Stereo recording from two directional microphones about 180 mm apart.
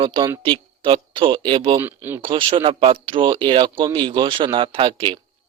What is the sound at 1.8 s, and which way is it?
Speech, 10° right (ahead or behind).